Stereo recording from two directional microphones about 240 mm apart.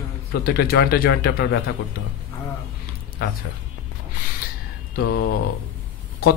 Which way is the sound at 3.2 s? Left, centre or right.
Left.